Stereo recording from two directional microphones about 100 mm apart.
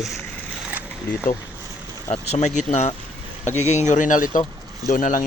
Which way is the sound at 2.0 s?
90° left.